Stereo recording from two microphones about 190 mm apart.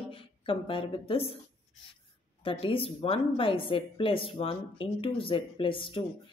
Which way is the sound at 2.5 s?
30° left (ahead or behind).